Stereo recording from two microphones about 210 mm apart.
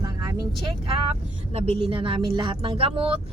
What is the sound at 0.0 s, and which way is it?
Speech, 20° right (ahead or behind).